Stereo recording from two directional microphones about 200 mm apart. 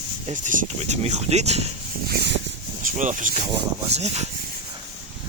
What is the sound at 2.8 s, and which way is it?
Speech, 40° right (ahead or behind).